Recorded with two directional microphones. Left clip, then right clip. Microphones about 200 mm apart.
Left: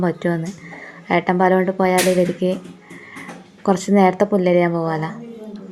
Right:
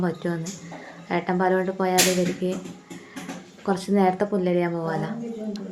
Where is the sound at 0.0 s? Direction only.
20° left (ahead or behind).